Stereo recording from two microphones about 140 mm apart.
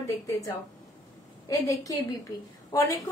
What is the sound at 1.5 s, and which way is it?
A woman's voice, 25° left (ahead or behind).